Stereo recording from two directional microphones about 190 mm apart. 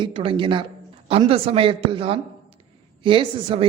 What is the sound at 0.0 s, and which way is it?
A man's voice, 30° right (ahead or behind).